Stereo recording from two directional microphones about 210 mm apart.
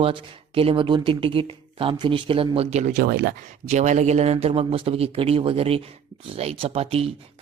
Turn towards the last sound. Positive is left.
turn(degrees=-30)  # may be behind; listen again after turning